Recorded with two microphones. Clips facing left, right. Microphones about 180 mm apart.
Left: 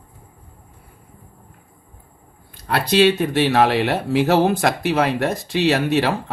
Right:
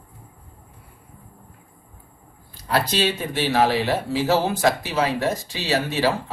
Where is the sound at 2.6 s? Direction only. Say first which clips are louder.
Left 5 dB; 60° left (ahead or behind).